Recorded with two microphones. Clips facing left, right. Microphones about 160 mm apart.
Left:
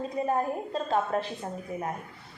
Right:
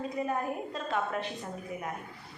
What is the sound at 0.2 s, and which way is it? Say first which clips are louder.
A woman's voice: left 5 dB; 30° left (ahead or behind).